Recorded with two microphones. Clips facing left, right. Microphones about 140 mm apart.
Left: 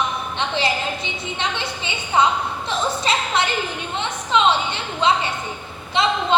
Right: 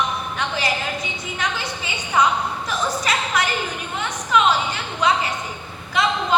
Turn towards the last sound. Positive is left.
turn(degrees=25)  # may be behind; listen again after turning